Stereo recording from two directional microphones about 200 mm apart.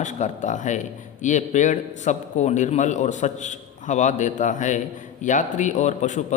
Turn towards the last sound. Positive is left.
turn(degrees=35)  # may be behind; listen again after turning